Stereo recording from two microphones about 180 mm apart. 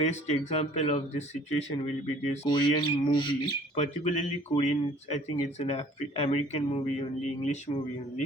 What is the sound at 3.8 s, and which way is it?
Speech, 40° left (ahead or behind).